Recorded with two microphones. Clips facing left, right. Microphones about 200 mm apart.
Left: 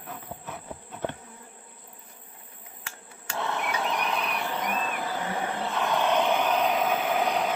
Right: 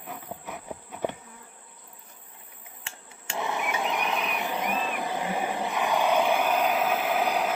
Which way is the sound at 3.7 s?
15° right (ahead or behind).